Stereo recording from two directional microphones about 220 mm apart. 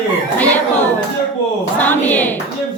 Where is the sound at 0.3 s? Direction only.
5° left (ahead or behind).